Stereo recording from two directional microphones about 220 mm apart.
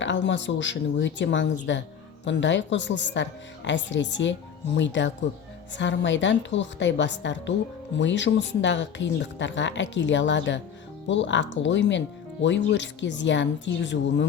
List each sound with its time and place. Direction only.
0.0 s speech: 55° left (ahead or behind)